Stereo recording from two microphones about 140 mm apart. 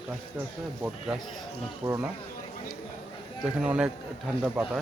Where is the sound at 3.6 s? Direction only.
10° right (ahead or behind).